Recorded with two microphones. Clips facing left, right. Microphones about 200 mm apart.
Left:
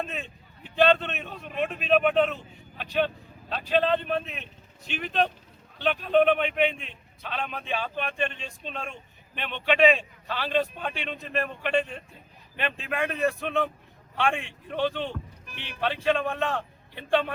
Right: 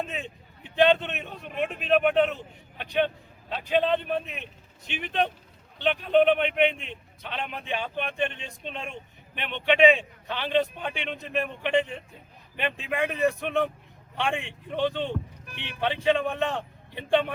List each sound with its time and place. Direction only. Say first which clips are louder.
0.0 s a man's voice: right 1 dB; 15° right (ahead or behind)
3.5 s a man's voice: even; 15° right (ahead or behind)